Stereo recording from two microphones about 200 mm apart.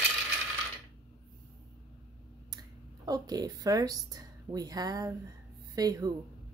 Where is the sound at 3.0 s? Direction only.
20° right (ahead or behind).